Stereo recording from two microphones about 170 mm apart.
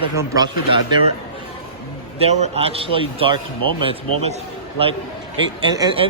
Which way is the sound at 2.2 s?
35° right (ahead or behind).